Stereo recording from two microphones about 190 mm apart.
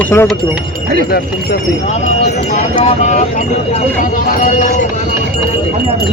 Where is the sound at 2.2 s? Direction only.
35° left (ahead or behind).